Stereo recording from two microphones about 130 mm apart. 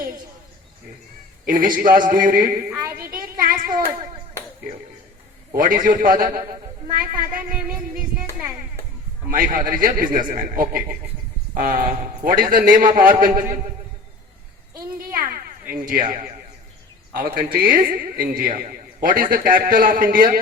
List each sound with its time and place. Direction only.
1.5 s a man's voice: 90° right
2.6 s a woman's voice: 25° right (ahead or behind)
3.0 s child singing: 90° right
5.5 s a man's voice: 90° right
9.3 s a man's voice: 90° right
15.7 s a man's voice: 90° right
17.2 s a man's voice: 90° right